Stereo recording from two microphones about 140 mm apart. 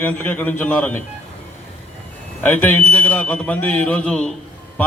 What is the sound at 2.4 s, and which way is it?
A man's voice, 10° left (ahead or behind).